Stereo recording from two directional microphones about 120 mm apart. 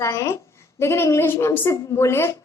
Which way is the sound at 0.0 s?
25° left (ahead or behind).